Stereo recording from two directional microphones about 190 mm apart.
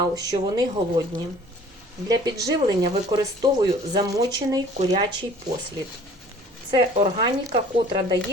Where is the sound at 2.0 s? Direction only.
20° right (ahead or behind).